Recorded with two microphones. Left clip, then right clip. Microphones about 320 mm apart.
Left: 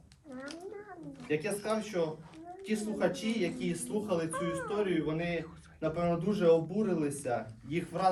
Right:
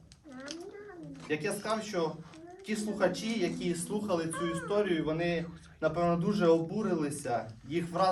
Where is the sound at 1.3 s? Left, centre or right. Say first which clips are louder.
Even; centre.